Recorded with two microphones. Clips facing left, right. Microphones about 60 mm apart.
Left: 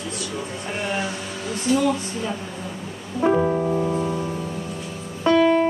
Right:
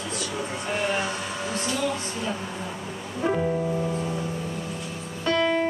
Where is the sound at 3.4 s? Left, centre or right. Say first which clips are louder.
Left 4 dB; left.